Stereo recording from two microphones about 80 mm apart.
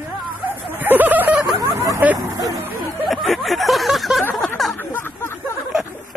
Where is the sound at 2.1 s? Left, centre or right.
Right.